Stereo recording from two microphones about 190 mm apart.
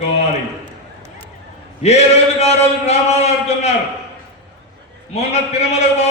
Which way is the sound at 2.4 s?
35° left (ahead or behind).